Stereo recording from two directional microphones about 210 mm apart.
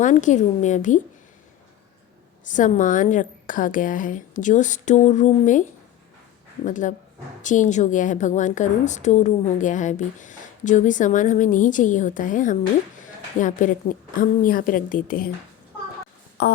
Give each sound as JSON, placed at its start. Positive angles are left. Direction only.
{"t": 0.0, "sound": "a woman's voice", "side_deg": 35}
{"t": 2.4, "sound": "a woman's voice", "side_deg": 35}
{"t": 6.7, "sound": "a woman's voice", "side_deg": 35}
{"t": 16.4, "sound": "a sound", "side_deg": 50}